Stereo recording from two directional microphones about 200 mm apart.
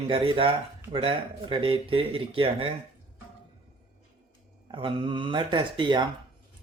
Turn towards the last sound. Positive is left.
turn(degrees=-25)  # may be behind; listen again after turning